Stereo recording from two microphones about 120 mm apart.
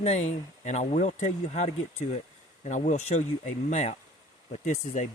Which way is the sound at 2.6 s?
90° left.